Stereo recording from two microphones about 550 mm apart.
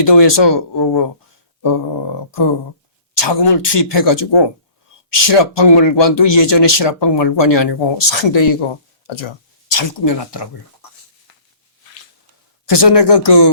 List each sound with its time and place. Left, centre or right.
0.0 s speech: left
3.2 s speech: left
12.6 s speech: left